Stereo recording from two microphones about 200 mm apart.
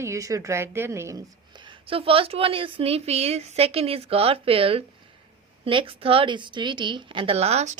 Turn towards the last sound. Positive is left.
turn(degrees=-35)  # may be behind; listen again after turning